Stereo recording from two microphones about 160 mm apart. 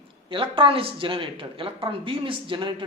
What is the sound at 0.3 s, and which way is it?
Speech, 30° right (ahead or behind).